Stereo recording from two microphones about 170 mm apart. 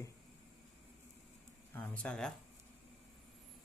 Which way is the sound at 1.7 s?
10° left (ahead or behind).